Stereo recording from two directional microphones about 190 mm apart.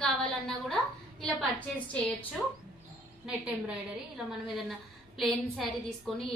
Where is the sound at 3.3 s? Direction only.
5° right (ahead or behind).